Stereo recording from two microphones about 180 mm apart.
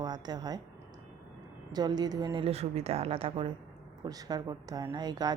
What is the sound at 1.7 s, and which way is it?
Speech, 20° right (ahead or behind).